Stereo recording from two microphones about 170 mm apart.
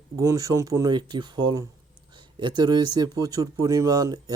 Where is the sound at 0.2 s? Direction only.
20° right (ahead or behind).